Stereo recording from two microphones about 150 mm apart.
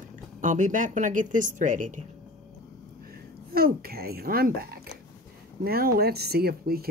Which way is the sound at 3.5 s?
90° right.